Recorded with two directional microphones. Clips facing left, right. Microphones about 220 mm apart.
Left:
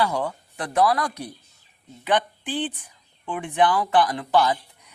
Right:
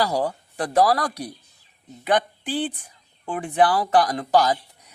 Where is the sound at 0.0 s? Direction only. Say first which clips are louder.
Right 2 dB; 35° right (ahead or behind).